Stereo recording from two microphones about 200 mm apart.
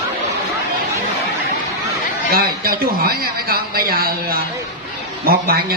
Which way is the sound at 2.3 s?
50° right (ahead or behind).